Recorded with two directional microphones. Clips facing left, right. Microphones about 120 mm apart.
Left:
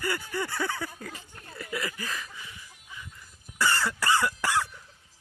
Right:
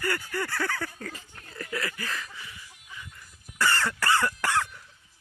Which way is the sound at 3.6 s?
10° left (ahead or behind).